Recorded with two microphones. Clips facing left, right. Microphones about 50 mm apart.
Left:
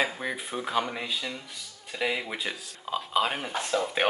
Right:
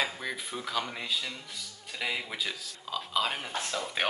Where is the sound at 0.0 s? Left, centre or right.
Centre.